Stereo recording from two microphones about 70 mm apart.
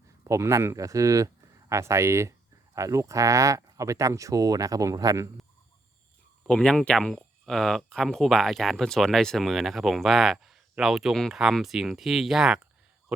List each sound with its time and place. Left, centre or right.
0.3 s speech: right
6.5 s speech: centre
13.1 s a sound: centre